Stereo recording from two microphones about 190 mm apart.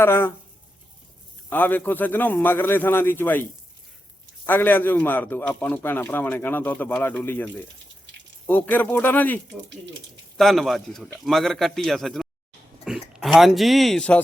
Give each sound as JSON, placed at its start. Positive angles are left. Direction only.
{"t": 0.0, "sound": "a man's voice", "side_deg": 10}
{"t": 1.5, "sound": "a man's voice", "side_deg": 10}
{"t": 4.4, "sound": "a man's voice", "side_deg": 10}
{"t": 9.6, "sound": "speech", "side_deg": -70}
{"t": 10.3, "sound": "a man's voice", "side_deg": 0}